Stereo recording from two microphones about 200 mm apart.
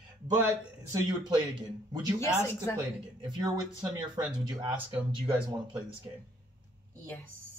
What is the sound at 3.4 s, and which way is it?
Speech, 20° right (ahead or behind).